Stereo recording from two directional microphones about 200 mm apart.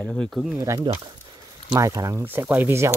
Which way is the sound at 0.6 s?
15° right (ahead or behind).